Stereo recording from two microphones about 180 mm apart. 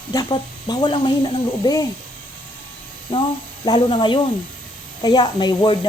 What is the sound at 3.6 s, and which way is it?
Speech, 25° left (ahead or behind).